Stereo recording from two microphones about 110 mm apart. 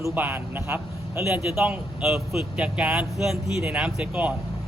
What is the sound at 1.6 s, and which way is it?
A man's voice, 10° right (ahead or behind).